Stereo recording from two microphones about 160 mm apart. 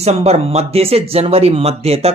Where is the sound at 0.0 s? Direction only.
40° right (ahead or behind).